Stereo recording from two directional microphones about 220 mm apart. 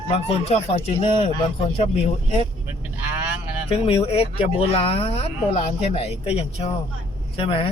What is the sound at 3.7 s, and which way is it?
Speech, 25° left (ahead or behind).